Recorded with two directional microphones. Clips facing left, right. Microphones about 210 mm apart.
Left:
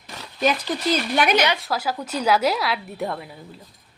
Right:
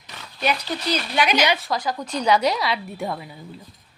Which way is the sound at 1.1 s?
55° left (ahead or behind).